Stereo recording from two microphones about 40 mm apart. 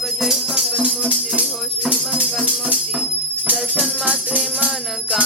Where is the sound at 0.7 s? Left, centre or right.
Right.